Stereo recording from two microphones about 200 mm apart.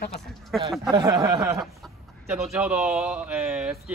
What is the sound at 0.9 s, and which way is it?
Speech, 20° right (ahead or behind).